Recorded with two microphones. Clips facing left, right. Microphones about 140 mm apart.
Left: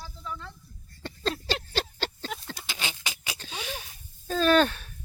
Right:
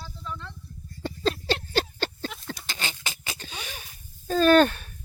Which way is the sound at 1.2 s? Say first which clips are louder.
Right 4 dB; centre (ahead or behind).